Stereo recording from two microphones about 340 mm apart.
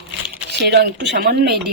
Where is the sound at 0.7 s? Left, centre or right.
Right.